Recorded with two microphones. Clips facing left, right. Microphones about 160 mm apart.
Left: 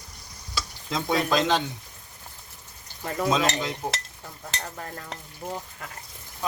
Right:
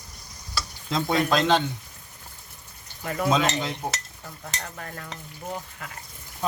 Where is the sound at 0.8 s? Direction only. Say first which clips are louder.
Right 2 dB; centre (ahead or behind).